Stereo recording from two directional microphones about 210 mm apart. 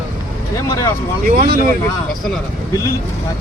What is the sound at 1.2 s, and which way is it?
Speech, 40° right (ahead or behind).